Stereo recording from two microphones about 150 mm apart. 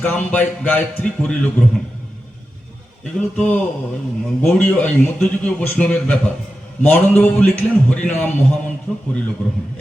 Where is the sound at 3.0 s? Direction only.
10° left (ahead or behind).